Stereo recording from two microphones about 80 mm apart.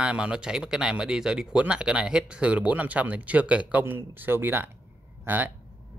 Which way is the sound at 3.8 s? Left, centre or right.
Right.